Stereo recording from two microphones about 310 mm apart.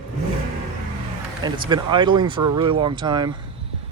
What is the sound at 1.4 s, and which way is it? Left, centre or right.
Speech, centre.